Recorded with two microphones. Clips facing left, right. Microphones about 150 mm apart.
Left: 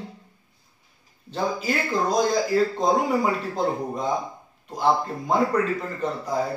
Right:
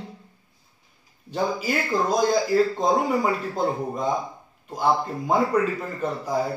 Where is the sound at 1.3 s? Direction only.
10° right (ahead or behind).